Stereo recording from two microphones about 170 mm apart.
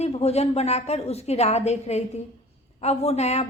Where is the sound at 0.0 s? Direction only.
40° left (ahead or behind).